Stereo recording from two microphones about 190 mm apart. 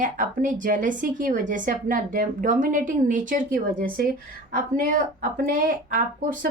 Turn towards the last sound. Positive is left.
turn(degrees=-45)  # may be behind; listen again after turning